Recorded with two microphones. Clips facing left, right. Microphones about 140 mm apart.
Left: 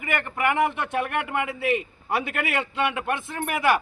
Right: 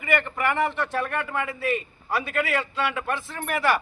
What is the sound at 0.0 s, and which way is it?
A man's voice, 10° left (ahead or behind).